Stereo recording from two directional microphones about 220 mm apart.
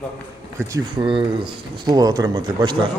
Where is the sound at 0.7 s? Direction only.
25° right (ahead or behind).